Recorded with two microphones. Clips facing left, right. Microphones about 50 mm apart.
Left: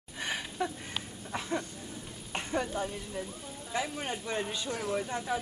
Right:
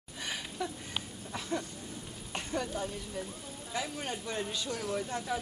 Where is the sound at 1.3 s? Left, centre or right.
Left.